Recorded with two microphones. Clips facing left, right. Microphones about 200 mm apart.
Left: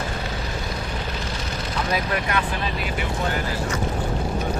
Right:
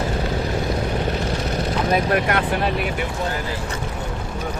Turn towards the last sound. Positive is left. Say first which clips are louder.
# right 5 dB
turn(degrees=-55)  # may be behind; listen again after turning